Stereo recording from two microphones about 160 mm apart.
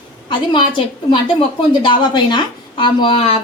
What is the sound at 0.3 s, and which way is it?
A woman's voice, 30° left (ahead or behind).